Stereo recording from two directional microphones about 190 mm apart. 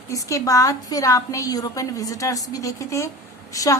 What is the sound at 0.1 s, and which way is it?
A woman's voice, 15° left (ahead or behind).